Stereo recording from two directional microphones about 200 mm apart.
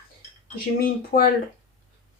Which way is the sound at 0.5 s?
50° left (ahead or behind).